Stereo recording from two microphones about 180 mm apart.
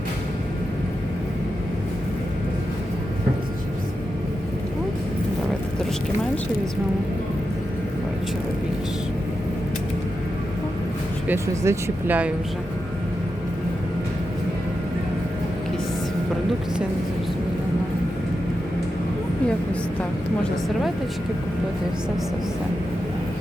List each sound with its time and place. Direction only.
11.3 s speech: 15° right (ahead or behind)